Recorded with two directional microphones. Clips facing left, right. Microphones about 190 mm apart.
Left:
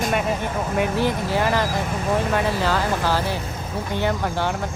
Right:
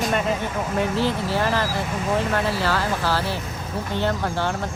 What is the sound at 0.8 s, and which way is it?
Speech, 15° left (ahead or behind).